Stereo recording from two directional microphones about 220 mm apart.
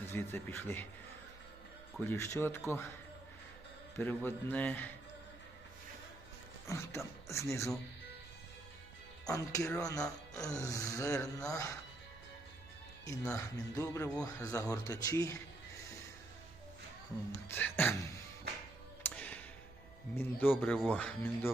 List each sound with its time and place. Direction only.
0.1 s speech: 10° left (ahead or behind)
2.0 s speech: 10° left (ahead or behind)
3.9 s speech: 10° left (ahead or behind)
6.7 s speech: 15° left (ahead or behind)
9.2 s speech: 15° left (ahead or behind)
13.3 s speech: 15° left (ahead or behind)
17.5 s speech: 10° left (ahead or behind)
19.0 s music: 5° left (ahead or behind)
20.1 s speech: 10° left (ahead or behind)